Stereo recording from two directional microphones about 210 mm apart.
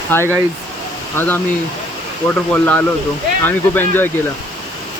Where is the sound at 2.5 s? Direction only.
5° left (ahead or behind).